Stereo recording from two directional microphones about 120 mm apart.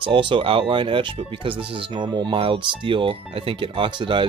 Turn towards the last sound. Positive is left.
turn(degrees=-45)  # may be behind; listen again after turning